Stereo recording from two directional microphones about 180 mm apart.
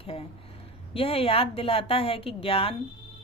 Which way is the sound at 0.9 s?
30° left (ahead or behind).